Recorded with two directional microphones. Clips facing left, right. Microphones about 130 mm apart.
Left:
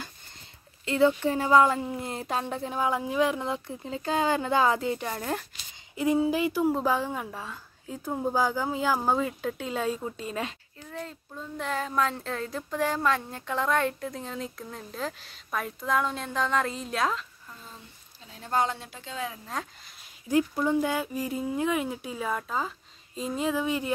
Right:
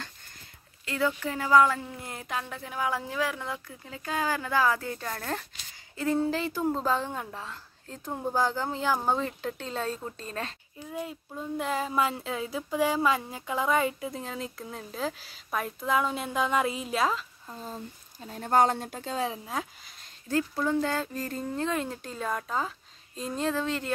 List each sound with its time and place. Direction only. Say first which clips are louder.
0.8 s a woman's voice: left 6 dB; 25° left (ahead or behind); by 10.5 s 10° left (ahead or behind)
10.9 s speech: right 2 dB; 10° right (ahead or behind)
17.5 s speech: right 8 dB; 40° right (ahead or behind)
19.4 s speech: right 1 dB; 5° right (ahead or behind)
20.2 s a woman's voice: left 3 dB; 15° left (ahead or behind)